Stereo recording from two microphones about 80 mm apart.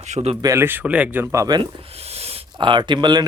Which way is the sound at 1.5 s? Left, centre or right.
Right.